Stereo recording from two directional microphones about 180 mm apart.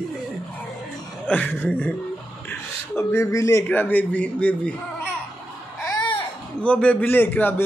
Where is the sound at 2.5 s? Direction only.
15° left (ahead or behind).